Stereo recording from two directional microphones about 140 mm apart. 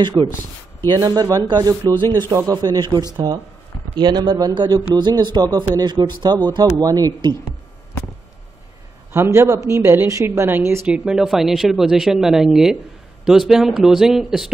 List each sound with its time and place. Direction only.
0.0 s speech: 30° right (ahead or behind)
9.1 s speech: 20° right (ahead or behind)
10.9 s speech: 5° right (ahead or behind)